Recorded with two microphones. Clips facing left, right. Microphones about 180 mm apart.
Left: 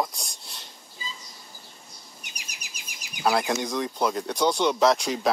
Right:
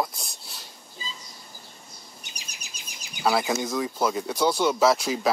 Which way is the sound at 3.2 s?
Centre (ahead or behind).